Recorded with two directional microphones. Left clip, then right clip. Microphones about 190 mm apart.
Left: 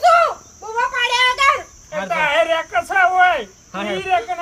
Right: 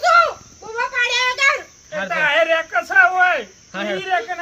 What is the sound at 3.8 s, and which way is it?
Speech, 45° left (ahead or behind).